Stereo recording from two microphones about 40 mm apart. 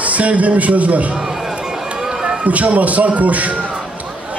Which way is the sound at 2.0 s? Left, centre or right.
Centre.